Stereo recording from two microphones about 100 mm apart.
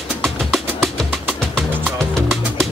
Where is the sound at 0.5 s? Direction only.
Centre (ahead or behind).